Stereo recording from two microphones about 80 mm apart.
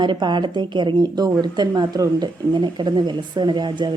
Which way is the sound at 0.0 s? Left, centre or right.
Right.